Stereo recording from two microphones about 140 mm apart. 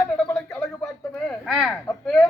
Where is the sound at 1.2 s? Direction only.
Centre (ahead or behind).